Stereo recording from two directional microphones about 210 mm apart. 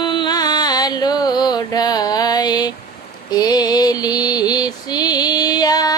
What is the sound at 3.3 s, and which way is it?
Mantra, 20° left (ahead or behind).